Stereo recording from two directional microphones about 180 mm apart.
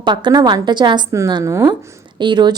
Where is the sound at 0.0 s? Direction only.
25° right (ahead or behind).